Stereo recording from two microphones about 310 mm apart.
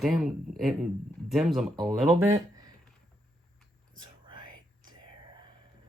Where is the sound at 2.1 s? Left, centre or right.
Centre.